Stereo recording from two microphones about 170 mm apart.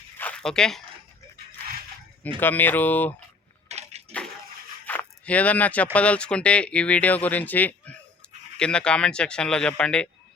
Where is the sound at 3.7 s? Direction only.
40° right (ahead or behind).